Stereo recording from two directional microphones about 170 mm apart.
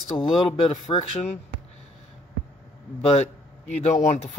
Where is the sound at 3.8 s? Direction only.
40° left (ahead or behind).